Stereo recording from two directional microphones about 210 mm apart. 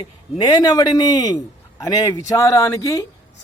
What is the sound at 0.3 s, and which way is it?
A man's voice, 20° left (ahead or behind).